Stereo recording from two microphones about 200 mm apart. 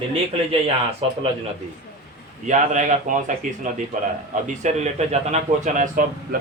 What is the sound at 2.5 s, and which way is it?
Speech, 40° right (ahead or behind).